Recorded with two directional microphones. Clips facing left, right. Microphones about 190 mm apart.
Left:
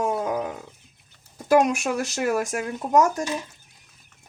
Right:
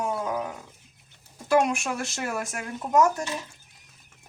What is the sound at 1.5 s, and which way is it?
Speech, 40° left (ahead or behind).